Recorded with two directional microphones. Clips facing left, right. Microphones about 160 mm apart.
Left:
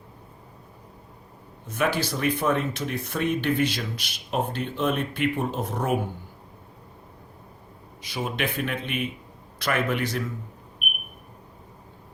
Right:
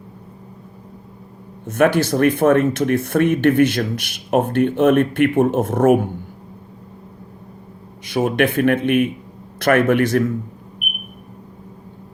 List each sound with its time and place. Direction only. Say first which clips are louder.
1.6 s speech: right 10 dB; 60° right (ahead or behind)
8.0 s speech: right 11 dB; 55° right (ahead or behind)